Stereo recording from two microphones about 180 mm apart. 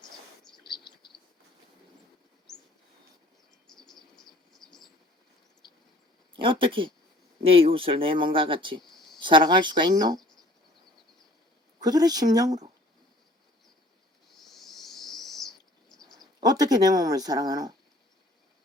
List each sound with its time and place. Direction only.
0.6 s bird: 25° left (ahead or behind)
3.7 s bird: centre (ahead or behind)
6.3 s speech: 30° right (ahead or behind)
11.8 s speech: 20° right (ahead or behind)
14.3 s owl: centre (ahead or behind)
16.1 s speech: 20° right (ahead or behind)